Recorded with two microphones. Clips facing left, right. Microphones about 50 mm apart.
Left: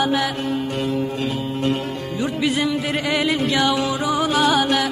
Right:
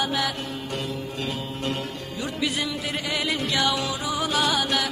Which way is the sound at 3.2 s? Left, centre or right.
Left.